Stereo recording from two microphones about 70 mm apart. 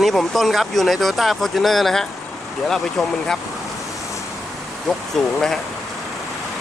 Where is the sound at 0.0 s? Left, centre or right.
Centre.